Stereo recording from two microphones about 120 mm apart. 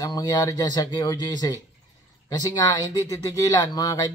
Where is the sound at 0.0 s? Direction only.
30° left (ahead or behind).